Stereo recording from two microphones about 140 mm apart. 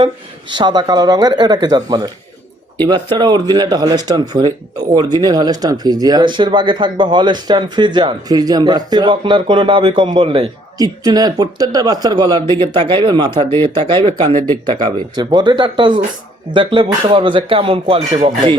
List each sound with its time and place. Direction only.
0.5 s speech: 30° right (ahead or behind)
10.8 s speech: 25° right (ahead or behind)